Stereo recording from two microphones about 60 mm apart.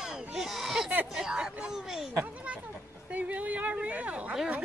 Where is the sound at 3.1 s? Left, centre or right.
Right.